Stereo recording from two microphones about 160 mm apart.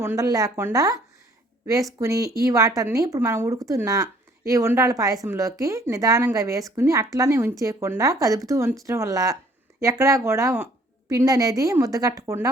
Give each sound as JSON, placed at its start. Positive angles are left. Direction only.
{"t": 0.0, "sound": "speech", "side_deg": -20}
{"t": 2.0, "sound": "speech", "side_deg": -20}